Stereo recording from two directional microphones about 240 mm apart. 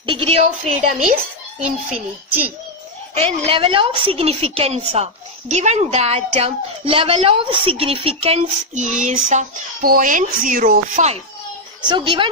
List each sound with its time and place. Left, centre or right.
0.0 s a child's voice: right
3.2 s a woman's voice: right
11.8 s a woman's voice: centre